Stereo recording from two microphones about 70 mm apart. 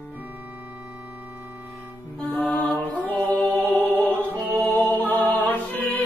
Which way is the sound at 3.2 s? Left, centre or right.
Left.